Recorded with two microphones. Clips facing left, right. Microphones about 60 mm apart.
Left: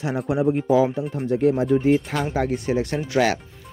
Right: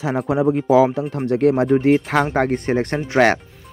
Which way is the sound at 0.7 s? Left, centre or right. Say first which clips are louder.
Right 4 dB; right.